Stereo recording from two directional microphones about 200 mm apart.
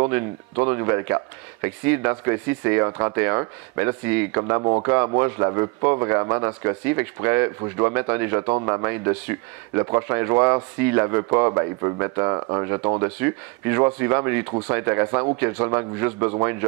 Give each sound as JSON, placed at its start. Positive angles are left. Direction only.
{"t": 0.6, "sound": "speech", "side_deg": -15}